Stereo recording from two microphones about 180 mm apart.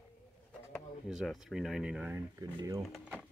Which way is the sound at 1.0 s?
Centre (ahead or behind).